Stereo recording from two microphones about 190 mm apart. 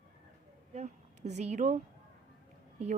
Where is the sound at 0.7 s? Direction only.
35° right (ahead or behind).